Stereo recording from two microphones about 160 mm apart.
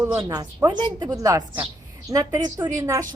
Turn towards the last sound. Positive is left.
turn(degrees=-20)  # may be behind; listen again after turning